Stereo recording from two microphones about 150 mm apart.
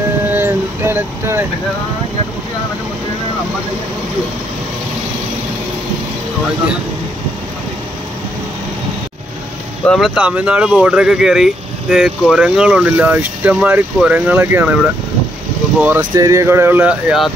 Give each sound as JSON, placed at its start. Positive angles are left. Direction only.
{"t": 0.3, "sound": "vehicle", "side_deg": -15}
{"t": 9.8, "sound": "speech", "side_deg": 0}
{"t": 16.0, "sound": "speech", "side_deg": -25}